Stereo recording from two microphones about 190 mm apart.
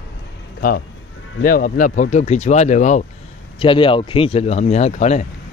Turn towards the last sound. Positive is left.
turn(degrees=35)  # may be behind; listen again after turning